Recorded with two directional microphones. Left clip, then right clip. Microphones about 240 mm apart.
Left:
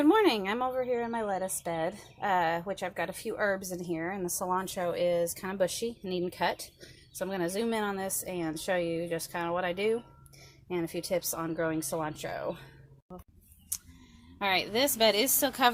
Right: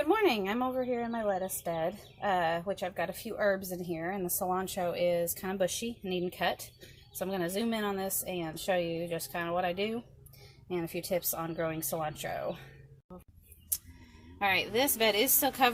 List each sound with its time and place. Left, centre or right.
0.0 s a woman's voice: left
14.3 s a woman's voice: centre